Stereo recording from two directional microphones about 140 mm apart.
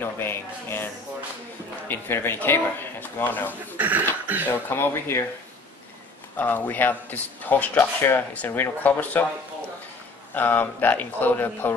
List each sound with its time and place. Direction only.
0.0 s speech: 15° left (ahead or behind)
1.9 s speech: 15° left (ahead or behind)
3.7 s speech: 10° right (ahead or behind)
4.5 s speech: 15° left (ahead or behind)
6.3 s speech: 10° left (ahead or behind)
10.3 s speech: 15° left (ahead or behind)